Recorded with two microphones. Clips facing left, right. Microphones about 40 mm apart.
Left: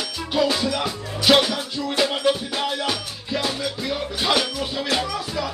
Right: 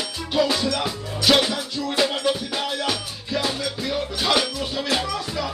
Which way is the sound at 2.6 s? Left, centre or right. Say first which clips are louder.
Left 1 dB; centre.